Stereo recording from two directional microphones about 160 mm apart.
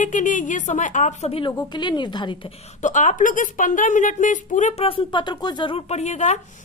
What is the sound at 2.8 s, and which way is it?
Speech, 50° left (ahead or behind).